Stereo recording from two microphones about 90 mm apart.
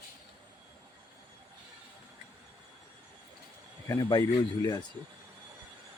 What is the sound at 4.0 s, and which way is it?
Speech, 55° left (ahead or behind).